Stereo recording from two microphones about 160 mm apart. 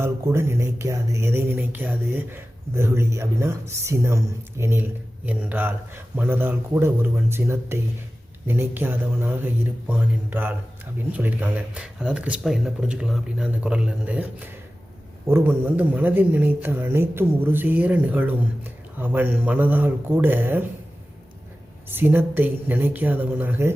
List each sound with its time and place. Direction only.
0.0 s speech: 15° right (ahead or behind)
21.8 s speech: 15° right (ahead or behind)